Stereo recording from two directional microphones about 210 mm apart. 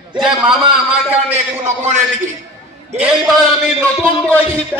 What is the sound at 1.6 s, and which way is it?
Speech, 35° right (ahead or behind).